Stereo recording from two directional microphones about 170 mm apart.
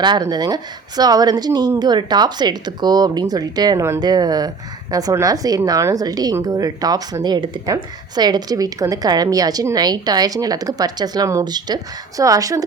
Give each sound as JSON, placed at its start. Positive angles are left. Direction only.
{"t": 0.0, "sound": "a woman's voice", "side_deg": -25}